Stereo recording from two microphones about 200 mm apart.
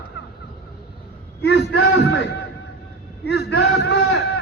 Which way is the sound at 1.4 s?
55° left (ahead or behind).